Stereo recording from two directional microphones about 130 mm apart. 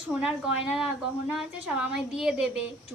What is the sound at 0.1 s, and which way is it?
A woman's voice, 10° right (ahead or behind).